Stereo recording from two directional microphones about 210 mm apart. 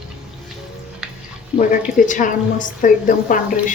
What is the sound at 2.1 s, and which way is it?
A woman's voice, 40° left (ahead or behind).